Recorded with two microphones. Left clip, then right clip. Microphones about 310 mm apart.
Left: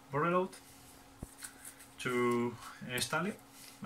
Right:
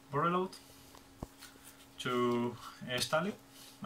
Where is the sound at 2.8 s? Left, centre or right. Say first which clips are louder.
Right 2 dB; centre.